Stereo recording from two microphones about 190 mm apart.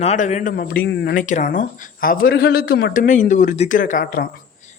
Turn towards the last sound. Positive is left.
turn(degrees=50)  # may be behind; listen again after turning